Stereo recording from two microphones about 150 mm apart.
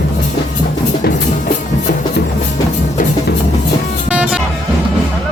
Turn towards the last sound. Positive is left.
turn(degrees=-10)  # may be behind; listen again after turning